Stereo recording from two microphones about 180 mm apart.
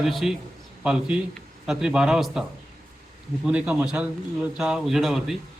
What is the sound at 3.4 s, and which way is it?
A man's voice, 5° right (ahead or behind).